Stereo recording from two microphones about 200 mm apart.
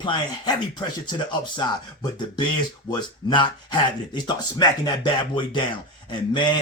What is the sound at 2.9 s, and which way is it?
Speech, 20° left (ahead or behind).